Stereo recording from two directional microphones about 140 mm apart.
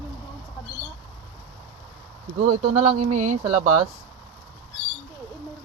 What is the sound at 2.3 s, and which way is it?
Speech, 60° right (ahead or behind).